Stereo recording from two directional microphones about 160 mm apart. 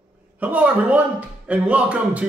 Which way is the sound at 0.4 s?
10° right (ahead or behind).